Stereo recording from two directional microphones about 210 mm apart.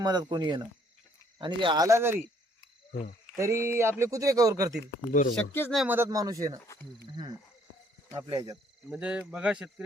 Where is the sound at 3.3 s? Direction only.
15° right (ahead or behind).